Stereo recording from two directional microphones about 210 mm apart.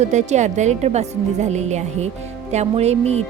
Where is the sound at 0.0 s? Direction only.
35° right (ahead or behind).